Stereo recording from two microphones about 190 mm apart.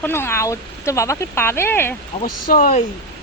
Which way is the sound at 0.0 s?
10° left (ahead or behind).